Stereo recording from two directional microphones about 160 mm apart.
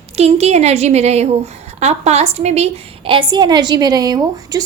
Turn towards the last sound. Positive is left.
turn(degrees=-25)  # may be behind; listen again after turning